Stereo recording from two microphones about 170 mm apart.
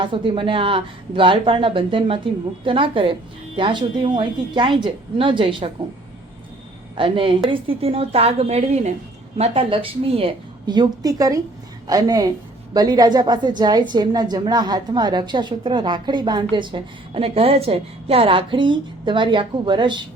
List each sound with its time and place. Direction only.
0.0 s a woman's voice: 30° right (ahead or behind)
6.9 s a woman's voice: 30° right (ahead or behind)